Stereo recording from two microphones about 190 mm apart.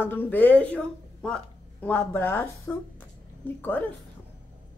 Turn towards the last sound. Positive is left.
turn(degrees=10)  # may be behind; listen again after turning